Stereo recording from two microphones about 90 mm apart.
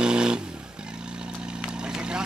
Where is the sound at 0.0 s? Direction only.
10° right (ahead or behind).